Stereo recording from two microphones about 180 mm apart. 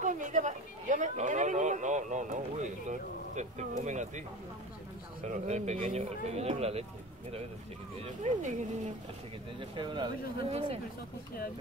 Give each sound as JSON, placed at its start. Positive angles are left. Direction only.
{"t": 0.0, "sound": "a sound", "side_deg": -45}
{"t": 3.8, "sound": "speech", "side_deg": -40}
{"t": 5.2, "sound": "speech", "side_deg": -40}
{"t": 9.6, "sound": "speech", "side_deg": -25}